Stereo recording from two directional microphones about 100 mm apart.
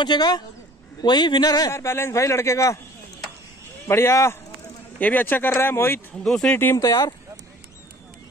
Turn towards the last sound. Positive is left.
turn(degrees=35)  # may be behind; listen again after turning